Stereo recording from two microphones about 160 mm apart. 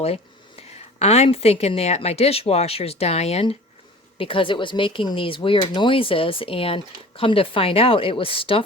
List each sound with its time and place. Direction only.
0.0 s speech: 40° left (ahead or behind)